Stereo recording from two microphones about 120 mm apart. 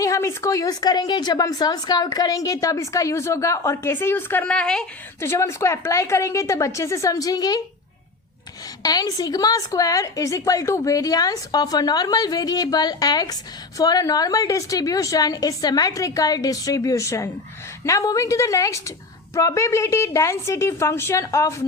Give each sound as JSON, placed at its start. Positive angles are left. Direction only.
{"t": 0.0, "sound": "a woman's voice", "side_deg": 25}
{"t": 5.2, "sound": "a woman's voice", "side_deg": 20}
{"t": 8.8, "sound": "a woman's voice", "side_deg": 30}